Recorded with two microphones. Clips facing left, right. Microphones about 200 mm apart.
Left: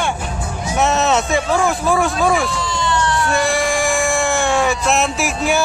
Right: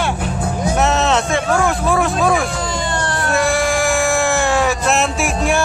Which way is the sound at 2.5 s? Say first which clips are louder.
Left 1 dB; 50° right (ahead or behind).